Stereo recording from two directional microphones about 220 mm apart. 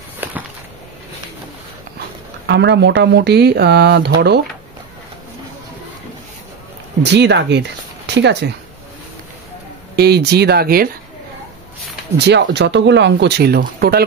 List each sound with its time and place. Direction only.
2.4 s speech: 50° right (ahead or behind)
7.0 s speech: 50° right (ahead or behind)
9.9 s speech: 50° right (ahead or behind)
12.3 s speech: 50° right (ahead or behind)